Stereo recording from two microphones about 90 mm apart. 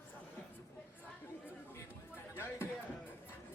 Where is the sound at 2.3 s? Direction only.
25° left (ahead or behind).